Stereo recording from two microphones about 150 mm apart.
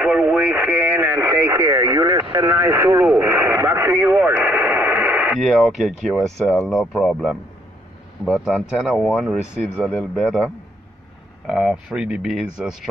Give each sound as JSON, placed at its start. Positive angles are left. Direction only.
{"t": 0.0, "sound": "radio", "side_deg": -10}
{"t": 5.4, "sound": "speech", "side_deg": 0}
{"t": 11.4, "sound": "speech", "side_deg": -5}